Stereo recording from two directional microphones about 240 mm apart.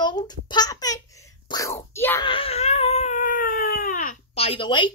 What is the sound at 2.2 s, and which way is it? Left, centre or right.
Baby cry, left.